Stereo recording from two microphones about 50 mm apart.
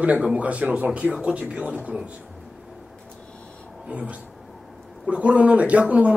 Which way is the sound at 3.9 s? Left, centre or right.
Right.